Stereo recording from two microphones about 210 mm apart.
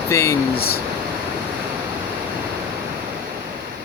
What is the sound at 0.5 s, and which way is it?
Speech, 45° left (ahead or behind).